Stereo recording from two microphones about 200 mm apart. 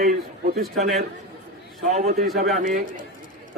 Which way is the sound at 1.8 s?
35° right (ahead or behind).